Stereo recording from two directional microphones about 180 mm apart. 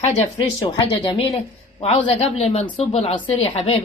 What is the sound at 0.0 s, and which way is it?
Speech, 35° left (ahead or behind).